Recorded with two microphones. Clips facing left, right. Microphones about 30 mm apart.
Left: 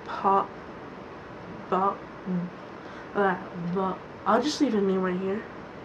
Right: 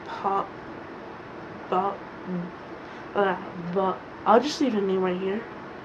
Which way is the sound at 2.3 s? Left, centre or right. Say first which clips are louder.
Left 2 dB; right.